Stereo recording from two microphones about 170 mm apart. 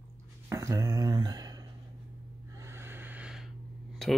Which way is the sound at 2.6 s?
15° right (ahead or behind).